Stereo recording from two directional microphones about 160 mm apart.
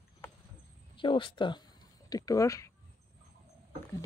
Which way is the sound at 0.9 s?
30° left (ahead or behind).